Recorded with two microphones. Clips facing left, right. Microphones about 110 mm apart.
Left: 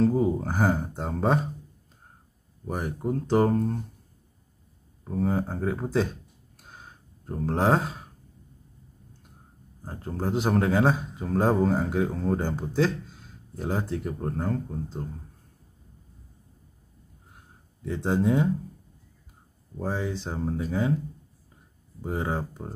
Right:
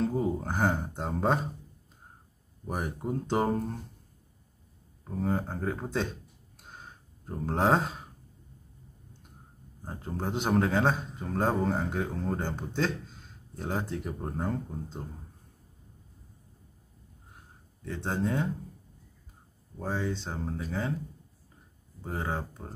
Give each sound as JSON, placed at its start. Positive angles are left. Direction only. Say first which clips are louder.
{"t": 0.0, "sound": "a man's voice", "louder": "left 6 dB", "side_deg": 0}
{"t": 2.6, "sound": "a man's voice", "louder": "left 4 dB", "side_deg": 0}
{"t": 5.0, "sound": "a man's voice", "louder": "left 4 dB", "side_deg": 0}
{"t": 6.6, "sound": "a sound", "louder": "even", "side_deg": 0}
{"t": 9.8, "sound": "a man's voice", "louder": "left 4 dB", "side_deg": 0}
{"t": 17.8, "sound": "speech", "louder": "left 6 dB", "side_deg": 10}
{"t": 19.8, "sound": "speech", "louder": "left 2 dB", "side_deg": 10}
{"t": 22.0, "sound": "speech", "louder": "left 4 dB", "side_deg": 10}